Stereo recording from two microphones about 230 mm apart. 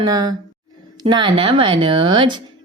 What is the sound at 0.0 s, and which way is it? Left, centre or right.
A woman's voice, centre.